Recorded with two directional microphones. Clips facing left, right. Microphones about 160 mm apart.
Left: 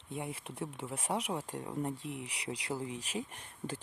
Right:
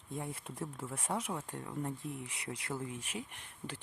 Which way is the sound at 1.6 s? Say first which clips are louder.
Left 3 dB; 20° left (ahead or behind).